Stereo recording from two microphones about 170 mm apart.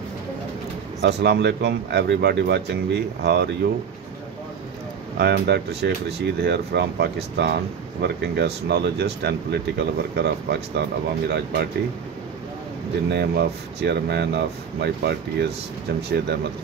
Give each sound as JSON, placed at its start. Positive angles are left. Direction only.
{"t": 1.0, "sound": "speech", "side_deg": -80}
{"t": 5.2, "sound": "speech", "side_deg": -75}
{"t": 13.1, "sound": "speech", "side_deg": -75}